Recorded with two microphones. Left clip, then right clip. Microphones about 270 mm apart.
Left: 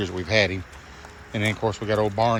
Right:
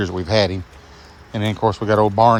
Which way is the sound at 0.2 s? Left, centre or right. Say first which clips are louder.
Right 3 dB; right.